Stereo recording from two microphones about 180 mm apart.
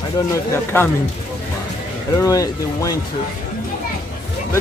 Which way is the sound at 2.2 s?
20° left (ahead or behind).